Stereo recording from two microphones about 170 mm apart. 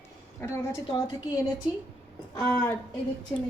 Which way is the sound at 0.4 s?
15° left (ahead or behind).